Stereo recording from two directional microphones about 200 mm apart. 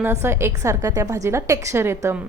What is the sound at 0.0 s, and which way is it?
A woman's voice, 10° right (ahead or behind).